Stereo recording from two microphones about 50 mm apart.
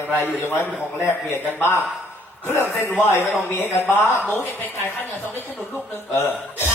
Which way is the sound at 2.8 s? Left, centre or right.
Left.